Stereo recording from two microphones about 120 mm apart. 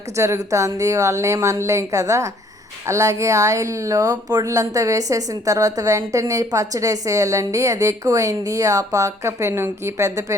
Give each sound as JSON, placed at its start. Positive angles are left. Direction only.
{"t": 0.2, "sound": "speech", "side_deg": -25}